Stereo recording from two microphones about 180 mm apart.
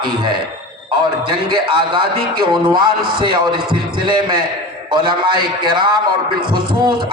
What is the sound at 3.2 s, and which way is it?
A man's voice, 25° right (ahead or behind).